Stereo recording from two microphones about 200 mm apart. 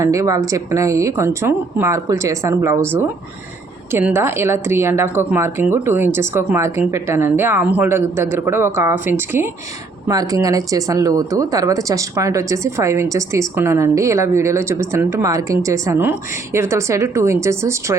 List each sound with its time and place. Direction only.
0.0 s speech: 15° right (ahead or behind)